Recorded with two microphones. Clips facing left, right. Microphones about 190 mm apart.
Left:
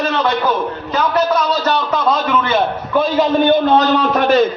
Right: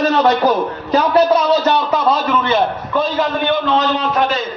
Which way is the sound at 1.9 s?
5° right (ahead or behind).